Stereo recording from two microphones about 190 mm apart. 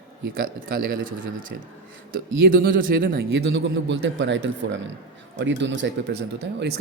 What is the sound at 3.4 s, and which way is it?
Speech, 75° right (ahead or behind).